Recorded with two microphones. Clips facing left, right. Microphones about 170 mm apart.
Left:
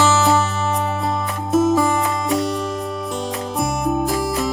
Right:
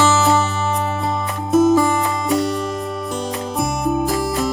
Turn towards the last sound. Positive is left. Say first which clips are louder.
# right 1 dB
turn(degrees=0)  # may be behind; listen again after turning